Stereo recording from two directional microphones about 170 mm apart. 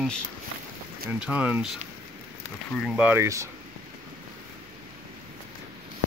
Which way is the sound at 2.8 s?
5° right (ahead or behind).